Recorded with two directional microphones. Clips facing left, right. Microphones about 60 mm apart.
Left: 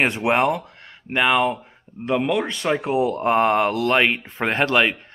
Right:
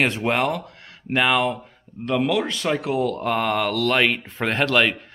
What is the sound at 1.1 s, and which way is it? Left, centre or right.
Speech, centre.